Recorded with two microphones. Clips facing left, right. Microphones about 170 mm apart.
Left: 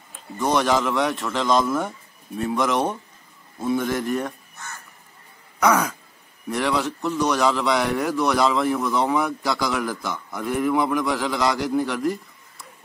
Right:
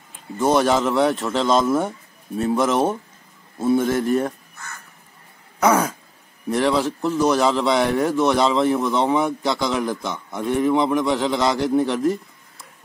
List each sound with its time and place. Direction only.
0.6 s a man's voice: 30° right (ahead or behind)
5.6 s a man's voice: 30° right (ahead or behind)
12.0 s a sound: centre (ahead or behind)